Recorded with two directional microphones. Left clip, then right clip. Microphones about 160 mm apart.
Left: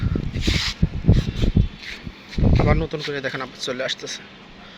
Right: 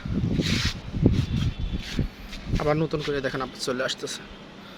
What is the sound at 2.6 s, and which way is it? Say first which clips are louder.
Speech: even; 20° right (ahead or behind).